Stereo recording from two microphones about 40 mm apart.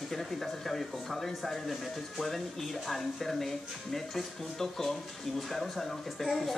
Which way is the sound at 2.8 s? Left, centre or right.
Centre.